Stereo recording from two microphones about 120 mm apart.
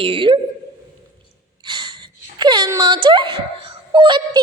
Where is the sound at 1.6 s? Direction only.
40° right (ahead or behind).